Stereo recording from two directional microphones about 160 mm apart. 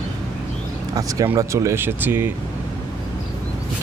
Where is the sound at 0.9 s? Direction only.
20° right (ahead or behind).